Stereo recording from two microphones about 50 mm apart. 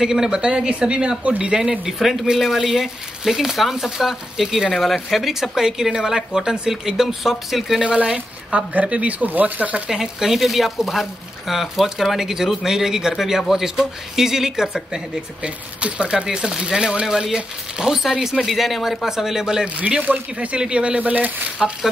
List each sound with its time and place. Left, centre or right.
0.0 s speech: centre
1.6 s speech: centre
7.8 s speech: right
9.8 s speech: centre
15.4 s speech: right
20.0 s speech: right
20.5 s speech: right
21.0 s speech: right